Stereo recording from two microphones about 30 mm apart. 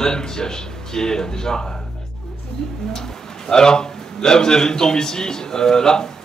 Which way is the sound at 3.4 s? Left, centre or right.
Left.